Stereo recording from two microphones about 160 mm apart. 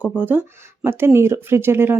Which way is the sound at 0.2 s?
10° right (ahead or behind).